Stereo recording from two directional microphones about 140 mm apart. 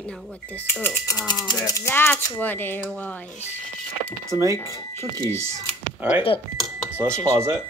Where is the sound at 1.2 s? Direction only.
30° left (ahead or behind); by 3.4 s 10° left (ahead or behind).